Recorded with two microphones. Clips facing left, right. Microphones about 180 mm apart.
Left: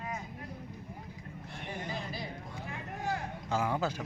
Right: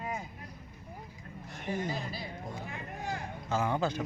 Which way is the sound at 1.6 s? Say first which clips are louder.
Right 6 dB; 45° right (ahead or behind).